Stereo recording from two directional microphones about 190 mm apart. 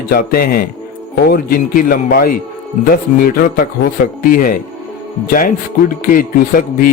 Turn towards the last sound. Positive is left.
turn(degrees=50)  # may be behind; listen again after turning